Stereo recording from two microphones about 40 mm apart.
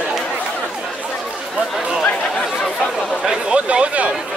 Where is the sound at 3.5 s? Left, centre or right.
Right.